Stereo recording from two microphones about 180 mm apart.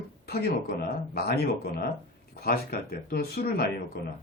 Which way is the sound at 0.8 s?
60° left (ahead or behind).